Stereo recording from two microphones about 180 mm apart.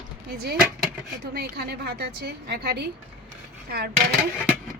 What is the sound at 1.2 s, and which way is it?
A woman's voice, 60° right (ahead or behind).